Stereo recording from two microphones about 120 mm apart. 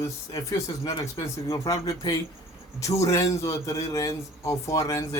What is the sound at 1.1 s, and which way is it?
Speech, 30° left (ahead or behind).